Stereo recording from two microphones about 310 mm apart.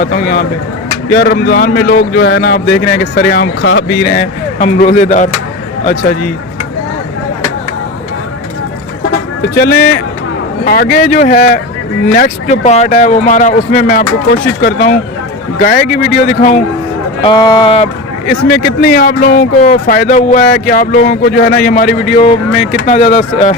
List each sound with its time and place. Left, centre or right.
0.0 s speech: left
9.6 s speech: left
17.2 s speech: centre
18.8 s speech: left